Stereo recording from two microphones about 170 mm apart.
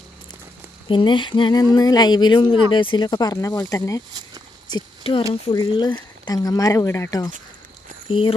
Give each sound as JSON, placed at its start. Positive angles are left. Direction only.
{"t": 0.9, "sound": "speech", "side_deg": 30}
{"t": 4.7, "sound": "speech", "side_deg": 30}